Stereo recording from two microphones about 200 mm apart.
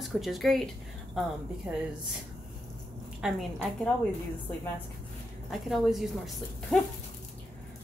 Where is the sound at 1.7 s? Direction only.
5° right (ahead or behind).